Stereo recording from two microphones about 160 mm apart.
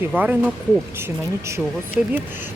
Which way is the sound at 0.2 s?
10° right (ahead or behind).